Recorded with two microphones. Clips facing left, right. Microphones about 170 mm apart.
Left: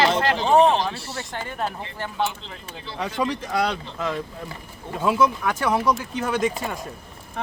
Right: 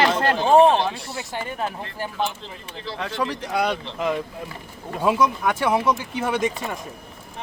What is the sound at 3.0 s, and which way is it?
Speech, 10° left (ahead or behind).